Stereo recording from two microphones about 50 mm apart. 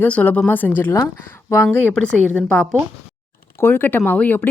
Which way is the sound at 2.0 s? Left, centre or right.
Centre.